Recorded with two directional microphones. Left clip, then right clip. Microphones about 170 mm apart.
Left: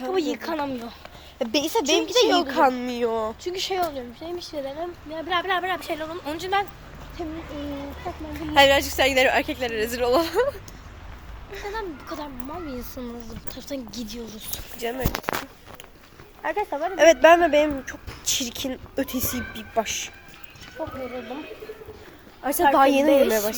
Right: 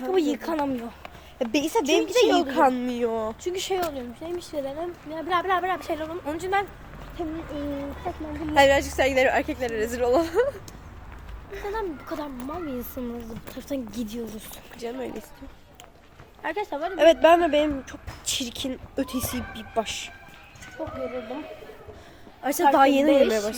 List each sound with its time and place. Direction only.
0.1 s speech: 35° right (ahead or behind)
1.4 s speech: 5° right (ahead or behind)
3.4 s speech: 15° right (ahead or behind)
5.5 s speech: 5° right (ahead or behind)
7.2 s speech: 25° right (ahead or behind)
8.5 s speech: centre (ahead or behind)
11.7 s speech: 20° right (ahead or behind)
13.2 s speech: 35° right (ahead or behind)
14.5 s speech: centre (ahead or behind)
16.4 s speech: 5° right (ahead or behind)
22.4 s speech: 10° right (ahead or behind)